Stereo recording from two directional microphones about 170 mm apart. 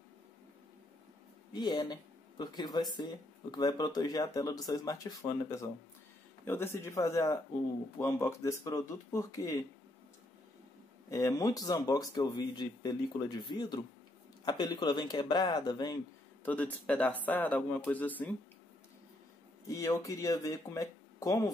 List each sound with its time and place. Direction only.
1.5 s speech: 25° left (ahead or behind)
6.4 s speech: 15° left (ahead or behind)
11.1 s speech: 20° left (ahead or behind)
16.4 s speech: 10° left (ahead or behind)
19.7 s speech: 20° left (ahead or behind)